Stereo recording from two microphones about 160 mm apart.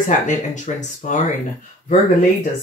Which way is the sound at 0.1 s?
50° left (ahead or behind).